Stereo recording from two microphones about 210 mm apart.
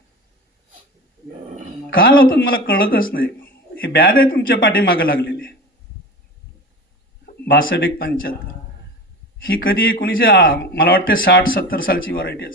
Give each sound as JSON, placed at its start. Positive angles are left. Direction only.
{"t": 1.9, "sound": "a man's voice", "side_deg": 45}
{"t": 7.3, "sound": "a sound", "side_deg": 45}
{"t": 7.8, "sound": "a man's voice", "side_deg": 45}
{"t": 9.4, "sound": "a man's voice", "side_deg": 45}